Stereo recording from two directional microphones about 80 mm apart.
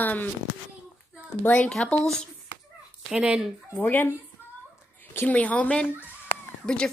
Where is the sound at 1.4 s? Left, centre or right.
Centre.